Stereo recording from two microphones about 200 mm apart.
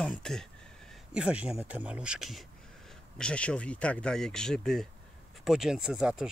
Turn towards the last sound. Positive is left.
turn(degrees=-5)  # may be behind; listen again after turning